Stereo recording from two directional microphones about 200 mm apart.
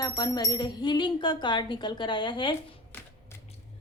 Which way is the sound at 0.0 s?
20° left (ahead or behind).